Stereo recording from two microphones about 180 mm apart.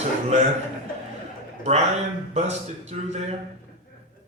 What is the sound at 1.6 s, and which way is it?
A man's voice, 35° right (ahead or behind).